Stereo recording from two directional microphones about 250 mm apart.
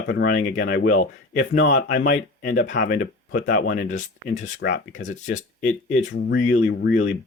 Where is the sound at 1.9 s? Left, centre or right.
Left.